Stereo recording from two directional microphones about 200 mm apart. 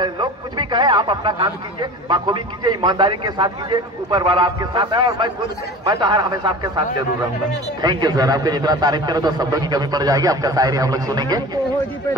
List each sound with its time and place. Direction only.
0.0 s a man's voice: 20° right (ahead or behind)
7.8 s a man's voice: 20° right (ahead or behind)